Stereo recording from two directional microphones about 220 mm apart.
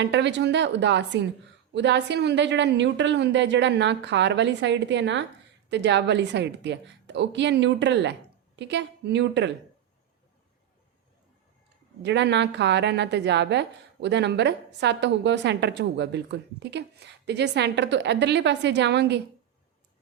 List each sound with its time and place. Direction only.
0.0 s a woman's voice: 50° right (ahead or behind)
12.0 s a woman's voice: 50° right (ahead or behind)